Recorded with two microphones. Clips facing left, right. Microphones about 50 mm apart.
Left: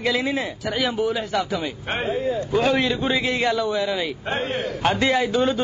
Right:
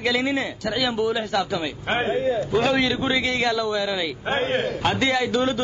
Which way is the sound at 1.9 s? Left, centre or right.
Right.